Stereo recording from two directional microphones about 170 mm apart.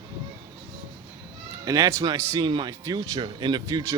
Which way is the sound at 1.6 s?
20° right (ahead or behind).